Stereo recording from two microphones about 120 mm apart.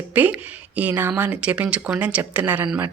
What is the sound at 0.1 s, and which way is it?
Speech, 15° right (ahead or behind).